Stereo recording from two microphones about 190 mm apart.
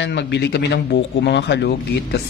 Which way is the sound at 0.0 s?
65° left (ahead or behind).